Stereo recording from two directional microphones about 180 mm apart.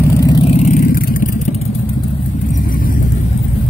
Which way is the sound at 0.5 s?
45° left (ahead or behind).